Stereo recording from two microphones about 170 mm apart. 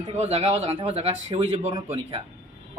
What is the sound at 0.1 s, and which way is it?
Speech, 40° right (ahead or behind).